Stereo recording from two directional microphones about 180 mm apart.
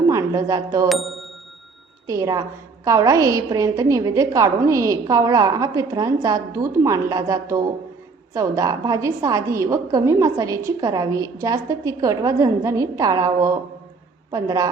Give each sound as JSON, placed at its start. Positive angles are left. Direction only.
{"t": 0.1, "sound": "speech", "side_deg": -15}
{"t": 0.9, "sound": "speech", "side_deg": 0}
{"t": 2.0, "sound": "a woman's voice", "side_deg": -20}